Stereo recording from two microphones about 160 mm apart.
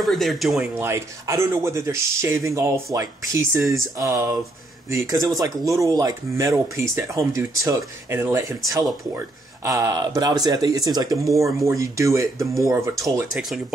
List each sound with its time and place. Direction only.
0.0 s speech: centre (ahead or behind)
0.7 s speech: 15° right (ahead or behind)
9.7 s speech: 20° right (ahead or behind)
13.3 s speech: centre (ahead or behind)